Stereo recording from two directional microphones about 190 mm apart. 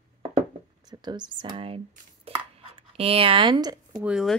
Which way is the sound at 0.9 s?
25° right (ahead or behind).